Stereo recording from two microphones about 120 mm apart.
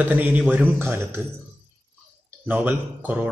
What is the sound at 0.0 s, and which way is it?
Speech, 15° right (ahead or behind).